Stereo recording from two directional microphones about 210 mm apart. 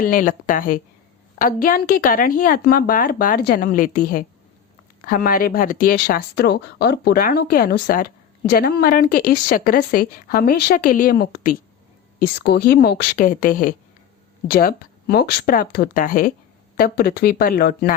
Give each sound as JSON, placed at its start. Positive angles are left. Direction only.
{"t": 0.0, "sound": "speech", "side_deg": 40}